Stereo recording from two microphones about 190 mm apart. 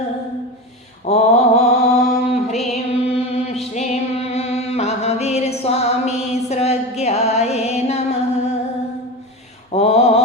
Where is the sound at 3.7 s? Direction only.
35° left (ahead or behind).